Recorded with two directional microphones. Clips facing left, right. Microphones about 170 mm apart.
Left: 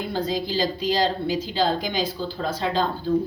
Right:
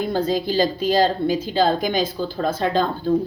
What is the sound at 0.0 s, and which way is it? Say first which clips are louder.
A woman's voice: right 5 dB; 45° right (ahead or behind).